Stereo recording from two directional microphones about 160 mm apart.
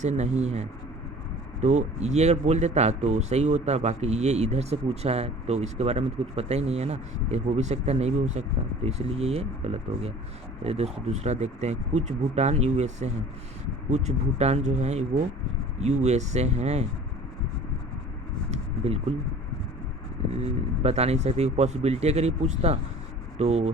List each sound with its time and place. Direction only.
0.0 s speech: 45° right (ahead or behind)
1.6 s speech: 45° right (ahead or behind)
18.8 s speech: 40° right (ahead or behind)
20.4 s speech: 40° right (ahead or behind)